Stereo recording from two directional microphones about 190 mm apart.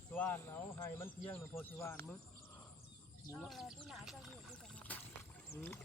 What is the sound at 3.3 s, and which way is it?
Speech, 5° left (ahead or behind).